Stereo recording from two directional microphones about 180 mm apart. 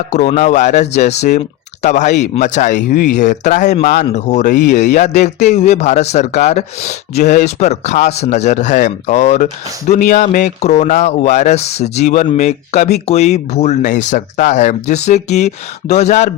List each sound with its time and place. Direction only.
0.1 s speech: 40° left (ahead or behind)